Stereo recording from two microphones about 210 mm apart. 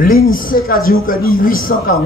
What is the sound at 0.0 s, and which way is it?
A man's voice, 40° left (ahead or behind).